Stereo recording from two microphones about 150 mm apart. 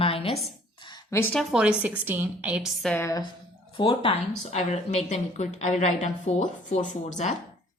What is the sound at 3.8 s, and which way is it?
Speech, 35° left (ahead or behind).